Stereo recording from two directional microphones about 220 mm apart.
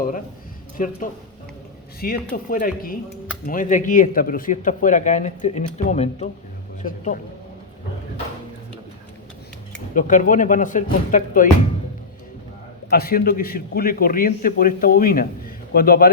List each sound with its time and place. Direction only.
0.8 s speech: 40° left (ahead or behind)
2.0 s a man's voice: 45° left (ahead or behind)
9.9 s speech: 35° left (ahead or behind)
12.9 s a man's voice: 45° left (ahead or behind)